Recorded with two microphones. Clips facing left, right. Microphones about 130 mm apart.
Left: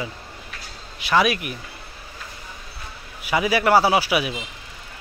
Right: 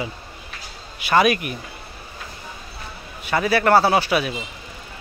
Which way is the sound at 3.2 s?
10° left (ahead or behind).